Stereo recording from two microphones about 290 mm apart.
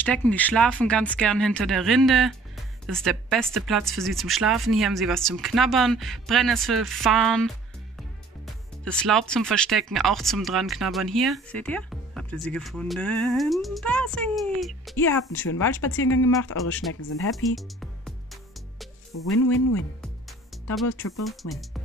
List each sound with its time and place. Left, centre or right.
0.0 s speech: centre
8.8 s speech: centre
16.0 s speech: left
17.3 s music: centre
19.3 s speech: left
20.8 s speech: left
21.2 s speech: centre